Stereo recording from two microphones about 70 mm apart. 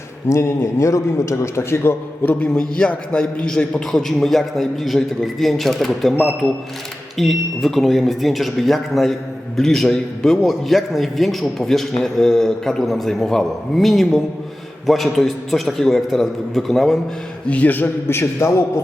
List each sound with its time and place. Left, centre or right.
0.3 s a man's voice: left
2.2 s a man's voice: left; by 17.0 s centre
17.5 s a man's voice: left